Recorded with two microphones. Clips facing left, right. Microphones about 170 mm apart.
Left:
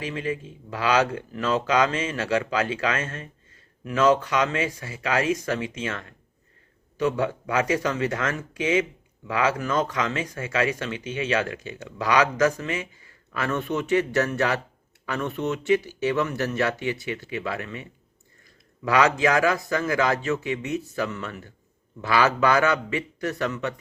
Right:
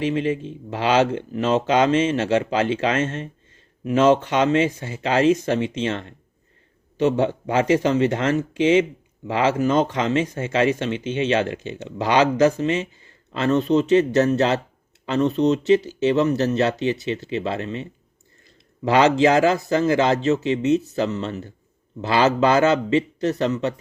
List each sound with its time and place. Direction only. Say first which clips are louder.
0.0 s speech: right 7 dB; 25° right (ahead or behind)
7.2 s a man's voice: right 4 dB; 25° right (ahead or behind)